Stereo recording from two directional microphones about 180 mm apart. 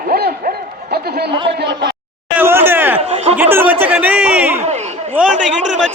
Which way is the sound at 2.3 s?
15° right (ahead or behind).